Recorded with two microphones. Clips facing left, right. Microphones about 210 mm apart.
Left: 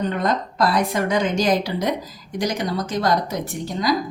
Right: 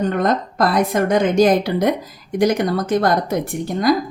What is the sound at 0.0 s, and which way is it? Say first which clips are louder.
A woman's voice: right 4 dB; 50° right (ahead or behind).